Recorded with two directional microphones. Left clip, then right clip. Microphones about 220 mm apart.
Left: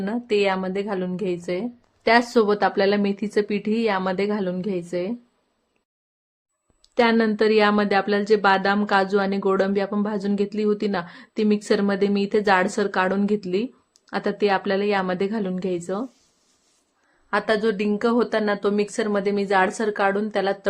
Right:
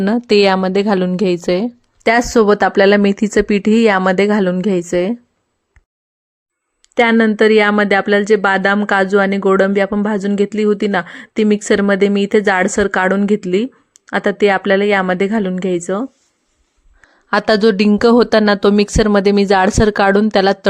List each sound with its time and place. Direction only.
0.0 s speech: 40° right (ahead or behind)
6.9 s speech: 30° right (ahead or behind)
17.2 s speech: 45° right (ahead or behind)